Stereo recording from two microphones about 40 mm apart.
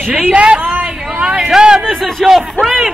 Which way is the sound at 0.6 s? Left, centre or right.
Right.